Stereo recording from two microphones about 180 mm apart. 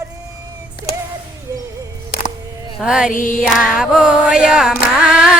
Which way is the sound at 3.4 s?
5° right (ahead or behind).